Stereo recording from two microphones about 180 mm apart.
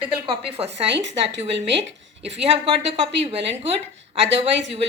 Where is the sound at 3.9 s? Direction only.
80° right.